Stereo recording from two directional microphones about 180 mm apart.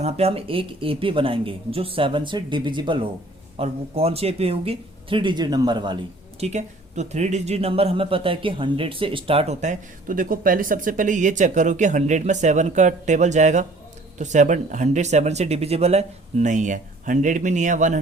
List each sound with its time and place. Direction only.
0.0 s speech: 35° right (ahead or behind)
6.4 s speech: 40° right (ahead or behind)